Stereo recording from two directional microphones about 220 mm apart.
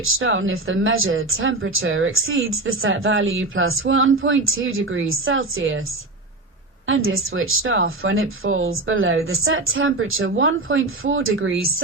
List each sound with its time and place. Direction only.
0.2 s speech: 65° right (ahead or behind)